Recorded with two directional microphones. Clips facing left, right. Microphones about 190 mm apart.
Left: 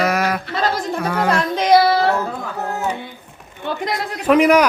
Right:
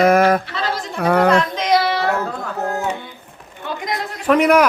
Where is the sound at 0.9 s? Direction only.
60° right (ahead or behind).